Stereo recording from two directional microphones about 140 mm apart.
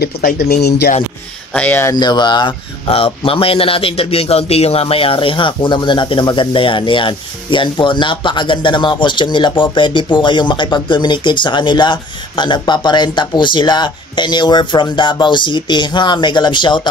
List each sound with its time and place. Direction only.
0.2 s speech: 80° left
1.5 s speech: 10° left (ahead or behind)
2.0 s speech: 30° left (ahead or behind)